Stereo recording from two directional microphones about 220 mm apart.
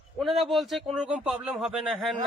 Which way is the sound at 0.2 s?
Centre (ahead or behind).